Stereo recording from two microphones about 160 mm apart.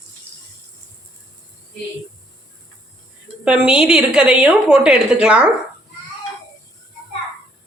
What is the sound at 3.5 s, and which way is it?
A woman's voice, 5° right (ahead or behind).